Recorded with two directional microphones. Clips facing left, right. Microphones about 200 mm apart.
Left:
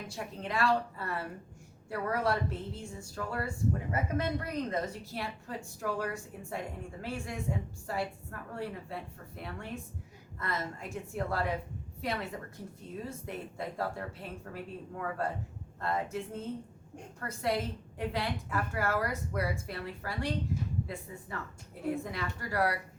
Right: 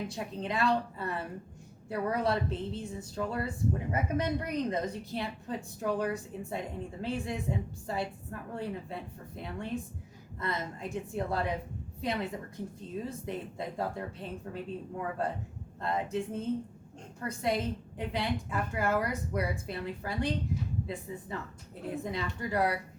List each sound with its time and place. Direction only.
0.1 s a woman's voice: 20° right (ahead or behind)